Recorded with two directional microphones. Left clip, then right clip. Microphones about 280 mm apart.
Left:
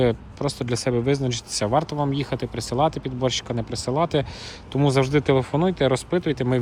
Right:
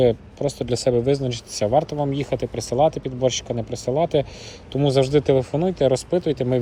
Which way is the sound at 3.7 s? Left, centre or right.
Centre.